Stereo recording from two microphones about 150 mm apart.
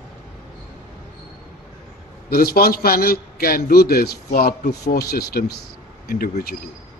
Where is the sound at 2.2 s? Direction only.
90° left.